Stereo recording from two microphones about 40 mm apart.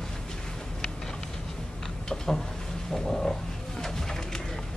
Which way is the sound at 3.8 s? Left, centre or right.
Centre.